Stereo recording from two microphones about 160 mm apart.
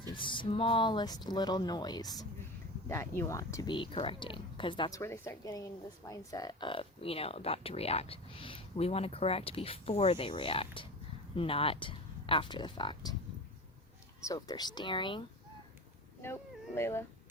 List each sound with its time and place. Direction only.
0.1 s speech: 30° left (ahead or behind)
3.7 s speech: 35° left (ahead or behind)
4.9 s speech: 15° left (ahead or behind)
14.3 s speech: 25° left (ahead or behind)
16.2 s speech: 15° left (ahead or behind)